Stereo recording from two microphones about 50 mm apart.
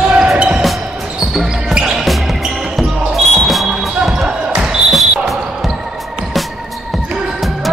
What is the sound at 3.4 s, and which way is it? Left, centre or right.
Basketball bounce, centre.